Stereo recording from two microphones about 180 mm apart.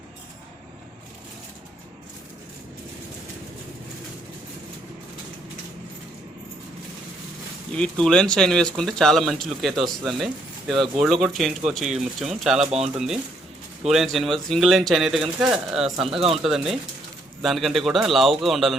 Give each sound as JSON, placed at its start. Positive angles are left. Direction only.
{"t": 7.7, "sound": "speech", "side_deg": 5}
{"t": 13.9, "sound": "speech", "side_deg": 0}